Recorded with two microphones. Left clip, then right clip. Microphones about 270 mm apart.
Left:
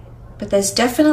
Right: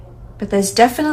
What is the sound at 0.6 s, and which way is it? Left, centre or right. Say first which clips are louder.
Speech: right 2 dB; left.